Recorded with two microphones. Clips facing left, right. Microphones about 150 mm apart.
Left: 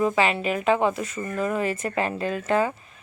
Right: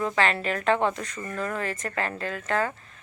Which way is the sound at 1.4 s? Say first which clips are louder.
Left 5 dB; 15° left (ahead or behind).